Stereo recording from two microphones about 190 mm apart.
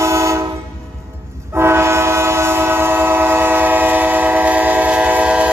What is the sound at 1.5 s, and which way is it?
Train, 15° right (ahead or behind).